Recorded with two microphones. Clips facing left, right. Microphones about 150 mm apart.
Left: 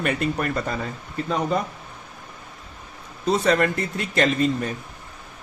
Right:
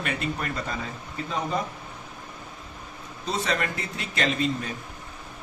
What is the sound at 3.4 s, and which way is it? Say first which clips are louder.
Speech: left 6 dB; 50° left (ahead or behind).